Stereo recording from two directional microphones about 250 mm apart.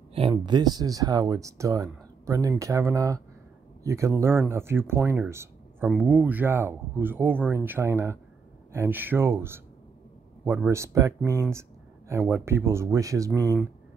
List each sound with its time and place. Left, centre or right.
0.1 s speech: right